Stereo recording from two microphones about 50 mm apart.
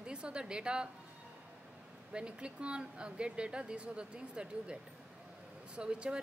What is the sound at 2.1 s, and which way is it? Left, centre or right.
A woman's voice, right.